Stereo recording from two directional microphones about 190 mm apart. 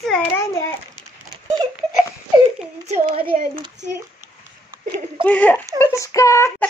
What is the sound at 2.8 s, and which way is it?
Speech, 35° right (ahead or behind).